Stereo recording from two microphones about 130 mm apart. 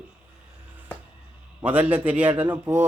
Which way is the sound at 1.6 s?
15° right (ahead or behind).